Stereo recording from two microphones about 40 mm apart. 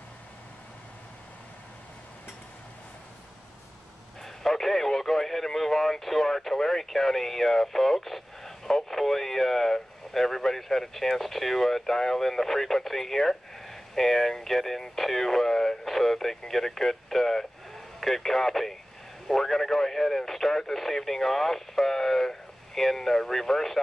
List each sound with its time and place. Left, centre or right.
4.2 s speech: centre